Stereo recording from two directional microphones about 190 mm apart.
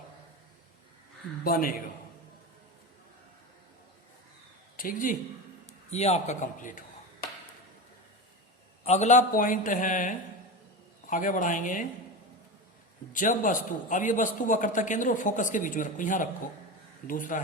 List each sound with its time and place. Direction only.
1.5 s a man's voice: 50° left (ahead or behind)
4.8 s a man's voice: 45° left (ahead or behind)
5.9 s a man's voice: 35° left (ahead or behind)
8.8 s a man's voice: 35° left (ahead or behind)
13.1 s a man's voice: 45° left (ahead or behind)